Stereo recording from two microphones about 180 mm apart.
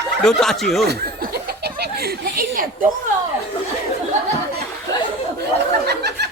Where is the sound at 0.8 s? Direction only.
60° right (ahead or behind).